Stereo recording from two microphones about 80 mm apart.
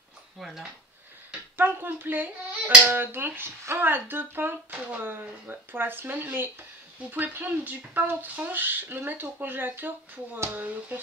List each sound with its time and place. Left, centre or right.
0.4 s speech: centre
1.6 s speech: right